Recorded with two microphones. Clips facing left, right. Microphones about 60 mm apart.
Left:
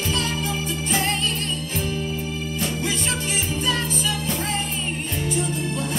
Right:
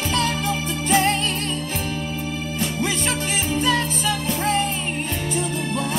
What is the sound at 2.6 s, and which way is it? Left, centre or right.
Music, right.